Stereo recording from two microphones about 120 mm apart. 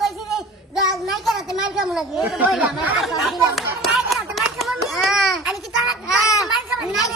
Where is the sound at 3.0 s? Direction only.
Centre (ahead or behind).